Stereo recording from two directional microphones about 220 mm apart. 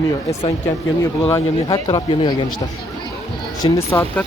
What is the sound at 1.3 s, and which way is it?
Speech, 20° left (ahead or behind).